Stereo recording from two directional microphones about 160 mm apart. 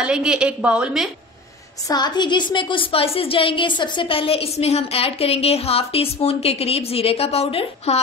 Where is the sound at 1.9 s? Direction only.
25° left (ahead or behind).